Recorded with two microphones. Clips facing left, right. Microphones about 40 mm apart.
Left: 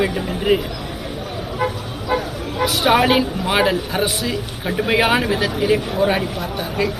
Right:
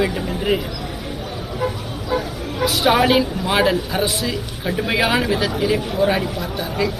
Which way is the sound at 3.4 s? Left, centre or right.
Left.